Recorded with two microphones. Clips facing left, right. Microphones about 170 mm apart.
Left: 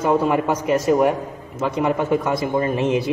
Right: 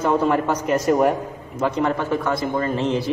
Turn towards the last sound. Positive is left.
turn(degrees=15)  # may be behind; listen again after turning